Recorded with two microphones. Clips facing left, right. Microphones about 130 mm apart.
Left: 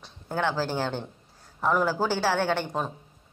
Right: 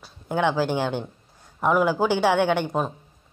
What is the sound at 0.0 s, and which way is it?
Speech, 15° right (ahead or behind).